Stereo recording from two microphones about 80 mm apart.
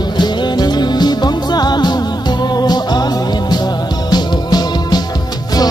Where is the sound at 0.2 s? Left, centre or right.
Left.